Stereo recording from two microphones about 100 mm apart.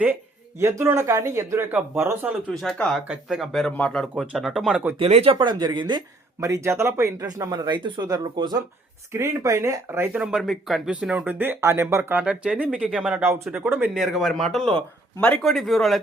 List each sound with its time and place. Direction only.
0.6 s speech: 25° right (ahead or behind)
2.5 s speech: 5° left (ahead or behind)
3.7 s speech: 10° left (ahead or behind)
4.3 s speech: 5° right (ahead or behind)
4.9 s speech: 80° right; by 6.0 s 50° right (ahead or behind)
6.4 s speech: 30° right (ahead or behind)
9.1 s speech: 30° right (ahead or behind)
10.1 s speech: 5° right (ahead or behind)
11.3 s speech: 20° right (ahead or behind)
12.2 s speech: 10° right (ahead or behind)
13.9 s speech: centre (ahead or behind)
15.4 s speech: centre (ahead or behind)